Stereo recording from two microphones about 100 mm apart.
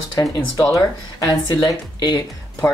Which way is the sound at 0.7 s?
45° left (ahead or behind).